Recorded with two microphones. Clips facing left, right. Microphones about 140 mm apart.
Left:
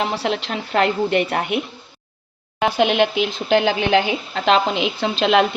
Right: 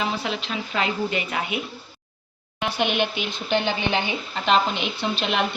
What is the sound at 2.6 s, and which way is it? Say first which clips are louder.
Speech: left 7 dB; 90° left.